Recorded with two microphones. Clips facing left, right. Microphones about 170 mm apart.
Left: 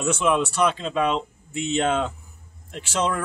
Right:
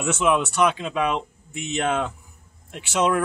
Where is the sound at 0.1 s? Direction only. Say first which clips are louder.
Right 1 dB; centre (ahead or behind).